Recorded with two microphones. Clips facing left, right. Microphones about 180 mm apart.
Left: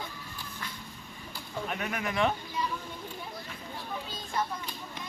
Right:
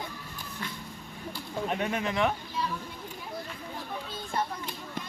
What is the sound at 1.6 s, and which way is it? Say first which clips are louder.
Speech: right 4 dB; 30° right (ahead or behind).